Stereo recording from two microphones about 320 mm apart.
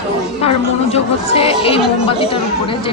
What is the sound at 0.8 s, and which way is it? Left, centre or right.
Speech, centre.